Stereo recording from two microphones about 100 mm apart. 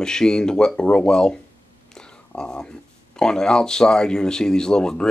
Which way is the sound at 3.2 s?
5° left (ahead or behind).